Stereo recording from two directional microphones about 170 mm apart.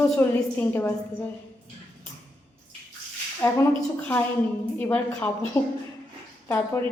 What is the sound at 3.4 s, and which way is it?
A woman's voice, 15° left (ahead or behind).